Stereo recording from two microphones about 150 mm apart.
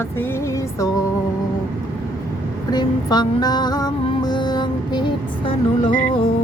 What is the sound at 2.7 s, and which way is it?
Music, 30° left (ahead or behind).